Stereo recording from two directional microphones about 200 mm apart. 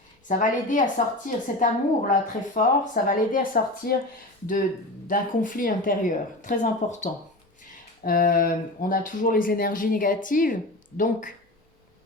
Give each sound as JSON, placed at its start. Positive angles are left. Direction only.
{"t": 0.3, "sound": "speech", "side_deg": 40}
{"t": 5.0, "sound": "speech", "side_deg": 45}